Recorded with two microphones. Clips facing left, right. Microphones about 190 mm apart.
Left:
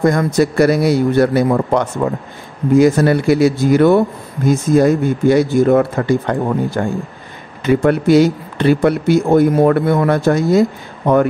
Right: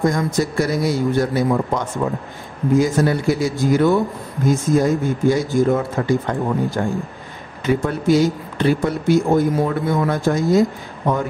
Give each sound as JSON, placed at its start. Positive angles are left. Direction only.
{"t": 0.0, "sound": "speech", "side_deg": 60}